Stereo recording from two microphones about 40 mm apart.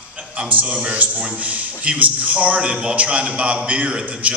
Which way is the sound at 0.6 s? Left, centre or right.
Right.